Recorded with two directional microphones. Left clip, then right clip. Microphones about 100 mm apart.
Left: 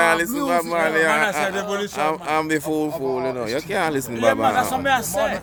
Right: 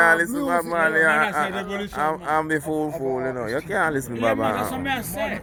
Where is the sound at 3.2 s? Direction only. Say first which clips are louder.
Left 2 dB; 90° left.